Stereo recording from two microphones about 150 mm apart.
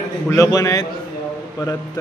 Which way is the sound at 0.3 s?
20° left (ahead or behind).